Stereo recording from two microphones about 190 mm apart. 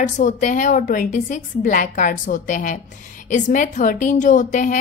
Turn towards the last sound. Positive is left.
turn(degrees=40)  # may be behind; listen again after turning